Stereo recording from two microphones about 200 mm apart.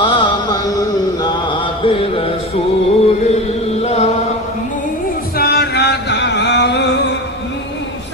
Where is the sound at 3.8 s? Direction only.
35° left (ahead or behind).